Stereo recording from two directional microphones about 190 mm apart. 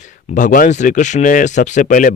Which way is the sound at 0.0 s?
40° left (ahead or behind).